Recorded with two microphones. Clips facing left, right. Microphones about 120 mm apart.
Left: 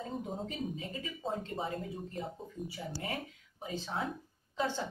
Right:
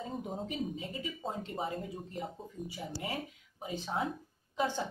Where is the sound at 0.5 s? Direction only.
15° right (ahead or behind).